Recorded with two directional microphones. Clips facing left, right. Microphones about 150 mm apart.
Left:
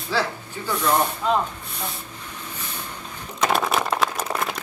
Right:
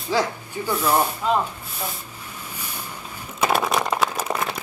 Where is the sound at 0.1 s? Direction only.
15° right (ahead or behind).